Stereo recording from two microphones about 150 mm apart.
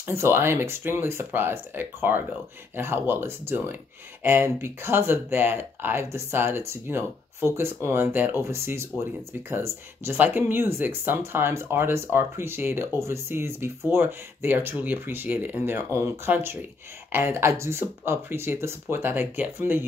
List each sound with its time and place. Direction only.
0.0 s speech: 15° right (ahead or behind)